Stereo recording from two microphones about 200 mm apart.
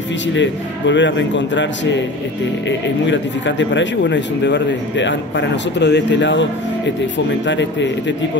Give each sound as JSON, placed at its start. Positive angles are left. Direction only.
{"t": 0.3, "sound": "speech", "side_deg": 65}
{"t": 3.1, "sound": "speech", "side_deg": 65}